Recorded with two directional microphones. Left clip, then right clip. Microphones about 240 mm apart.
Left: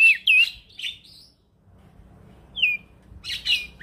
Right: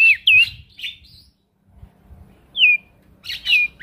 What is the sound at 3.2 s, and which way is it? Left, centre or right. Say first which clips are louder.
Bird: right 4 dB; right.